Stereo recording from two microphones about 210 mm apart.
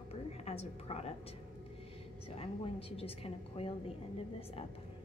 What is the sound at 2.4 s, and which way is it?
Speech, 25° left (ahead or behind).